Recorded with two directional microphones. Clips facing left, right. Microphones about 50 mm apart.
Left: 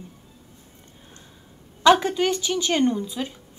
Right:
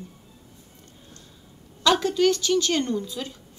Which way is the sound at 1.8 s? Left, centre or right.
Left.